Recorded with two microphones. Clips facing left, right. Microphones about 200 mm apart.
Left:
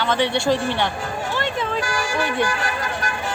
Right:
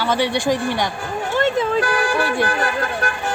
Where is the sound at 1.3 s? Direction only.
55° right (ahead or behind).